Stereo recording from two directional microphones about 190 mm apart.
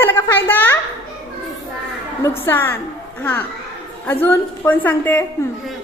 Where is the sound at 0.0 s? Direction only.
10° left (ahead or behind).